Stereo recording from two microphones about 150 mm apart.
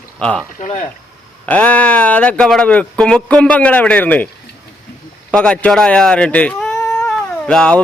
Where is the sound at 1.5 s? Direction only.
10° left (ahead or behind).